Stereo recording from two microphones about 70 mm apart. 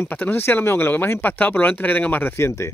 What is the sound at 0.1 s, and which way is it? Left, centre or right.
Speech, left.